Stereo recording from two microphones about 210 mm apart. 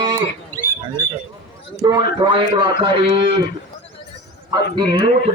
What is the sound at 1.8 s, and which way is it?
A man's voice, 20° right (ahead or behind).